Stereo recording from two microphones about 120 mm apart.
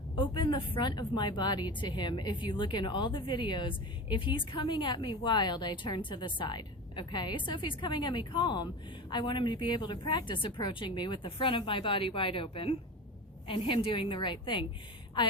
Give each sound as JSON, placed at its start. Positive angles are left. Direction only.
{"t": 0.2, "sound": "a woman's voice", "side_deg": 40}